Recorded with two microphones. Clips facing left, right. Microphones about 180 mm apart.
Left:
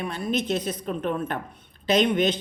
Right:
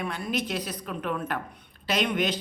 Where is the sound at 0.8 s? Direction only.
25° left (ahead or behind).